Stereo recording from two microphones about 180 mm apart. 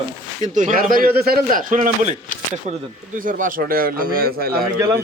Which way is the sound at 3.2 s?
50° right (ahead or behind).